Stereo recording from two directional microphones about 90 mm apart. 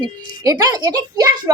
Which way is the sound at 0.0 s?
50° right (ahead or behind).